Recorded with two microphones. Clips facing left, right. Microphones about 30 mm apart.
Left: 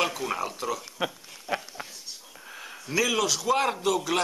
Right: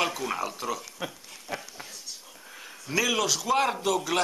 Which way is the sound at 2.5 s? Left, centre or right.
Centre.